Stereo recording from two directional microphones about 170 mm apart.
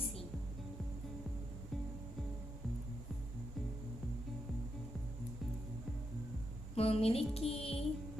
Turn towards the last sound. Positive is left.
turn(degrees=35)  # may be behind; listen again after turning